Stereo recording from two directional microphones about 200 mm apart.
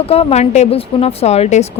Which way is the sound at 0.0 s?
30° left (ahead or behind).